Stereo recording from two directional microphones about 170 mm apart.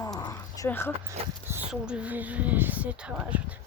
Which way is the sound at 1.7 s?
5° right (ahead or behind).